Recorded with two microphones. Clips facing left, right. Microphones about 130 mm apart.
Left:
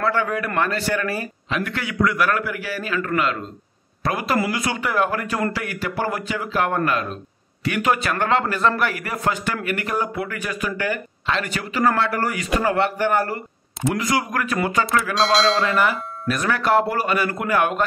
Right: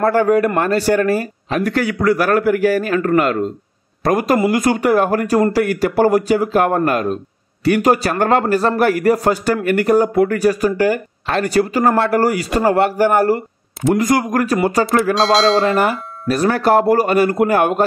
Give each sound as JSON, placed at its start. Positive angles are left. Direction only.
{"t": 0.0, "sound": "a man's voice", "side_deg": -40}
{"t": 15.1, "sound": "speech", "side_deg": 0}
{"t": 15.8, "sound": "a man's voice", "side_deg": -40}